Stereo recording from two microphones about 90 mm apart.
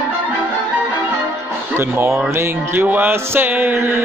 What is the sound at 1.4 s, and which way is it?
Music, 25° right (ahead or behind).